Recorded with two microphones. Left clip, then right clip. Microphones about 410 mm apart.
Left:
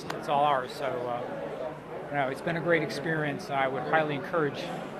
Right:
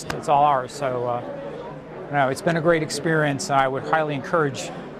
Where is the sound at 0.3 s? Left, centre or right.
Right.